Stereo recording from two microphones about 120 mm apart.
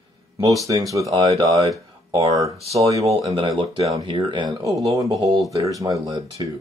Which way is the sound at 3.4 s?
50° right (ahead or behind).